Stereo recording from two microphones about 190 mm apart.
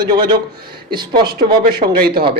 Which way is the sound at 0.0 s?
20° right (ahead or behind).